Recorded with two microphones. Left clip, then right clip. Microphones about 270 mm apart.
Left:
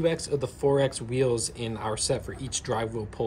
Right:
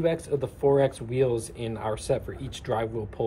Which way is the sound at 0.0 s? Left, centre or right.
Centre.